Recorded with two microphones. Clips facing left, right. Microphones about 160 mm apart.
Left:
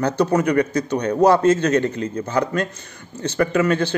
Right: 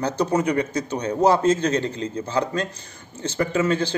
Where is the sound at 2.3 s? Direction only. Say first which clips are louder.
Left 3 dB; 30° right (ahead or behind).